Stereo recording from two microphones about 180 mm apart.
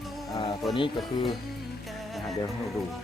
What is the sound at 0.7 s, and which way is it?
Speech, 25° left (ahead or behind).